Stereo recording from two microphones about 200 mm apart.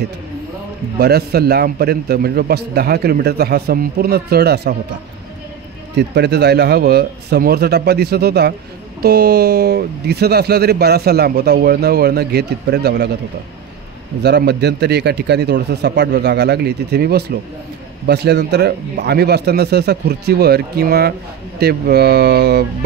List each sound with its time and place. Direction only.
0.9 s speech: 50° right (ahead or behind)
5.9 s a man's voice: 55° right (ahead or behind)
14.2 s a man's voice: 55° right (ahead or behind)